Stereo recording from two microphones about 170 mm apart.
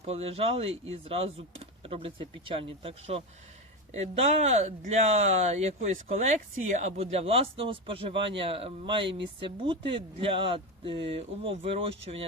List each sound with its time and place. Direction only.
0.0 s speech: 35° right (ahead or behind)